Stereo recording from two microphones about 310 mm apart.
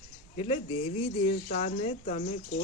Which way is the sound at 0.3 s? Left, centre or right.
Centre.